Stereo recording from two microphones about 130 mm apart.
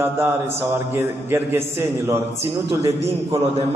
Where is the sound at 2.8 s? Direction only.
50° right (ahead or behind).